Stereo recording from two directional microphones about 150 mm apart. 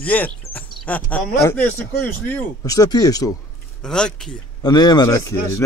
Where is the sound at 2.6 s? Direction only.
25° left (ahead or behind).